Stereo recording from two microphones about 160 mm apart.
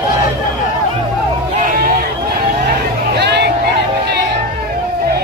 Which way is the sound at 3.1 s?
90° right.